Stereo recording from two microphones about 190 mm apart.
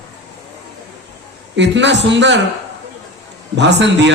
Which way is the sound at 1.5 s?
70° right (ahead or behind).